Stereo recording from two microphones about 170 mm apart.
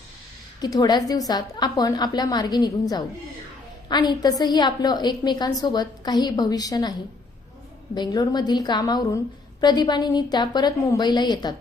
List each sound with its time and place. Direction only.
0.6 s a woman's voice: 25° left (ahead or behind)
7.9 s a woman's voice: 25° left (ahead or behind)